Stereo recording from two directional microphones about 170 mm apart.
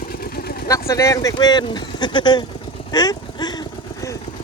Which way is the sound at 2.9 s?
25° left (ahead or behind).